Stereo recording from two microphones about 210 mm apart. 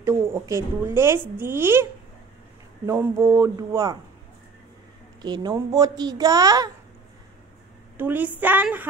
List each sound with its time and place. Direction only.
0.0 s a woman's voice: 10° right (ahead or behind)
2.9 s a woman's voice: 15° right (ahead or behind)
5.2 s a woman's voice: 20° right (ahead or behind)
8.0 s a woman's voice: 10° right (ahead or behind)